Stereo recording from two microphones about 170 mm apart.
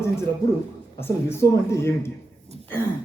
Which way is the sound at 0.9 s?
15° left (ahead or behind).